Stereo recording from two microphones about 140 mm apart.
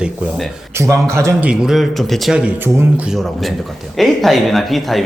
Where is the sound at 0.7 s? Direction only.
20° right (ahead or behind).